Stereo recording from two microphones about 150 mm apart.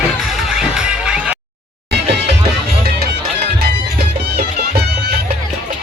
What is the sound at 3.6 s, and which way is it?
Music, 90° right.